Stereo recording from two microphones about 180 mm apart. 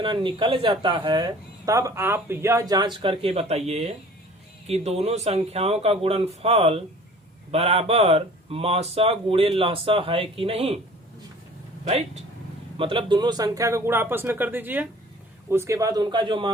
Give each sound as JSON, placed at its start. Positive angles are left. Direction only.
{"t": 0.0, "sound": "speech", "side_deg": -25}
{"t": 12.7, "sound": "speech", "side_deg": -30}